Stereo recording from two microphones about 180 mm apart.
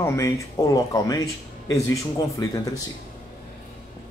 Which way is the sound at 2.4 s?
25° left (ahead or behind).